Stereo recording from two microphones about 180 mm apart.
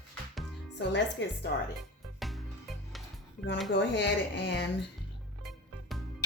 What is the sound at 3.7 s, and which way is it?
Speech, 75° left (ahead or behind).